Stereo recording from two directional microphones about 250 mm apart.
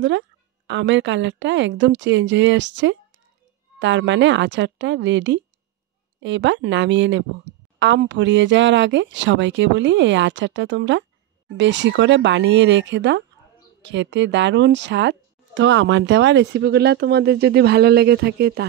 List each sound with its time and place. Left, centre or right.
0.7 s a woman's voice: right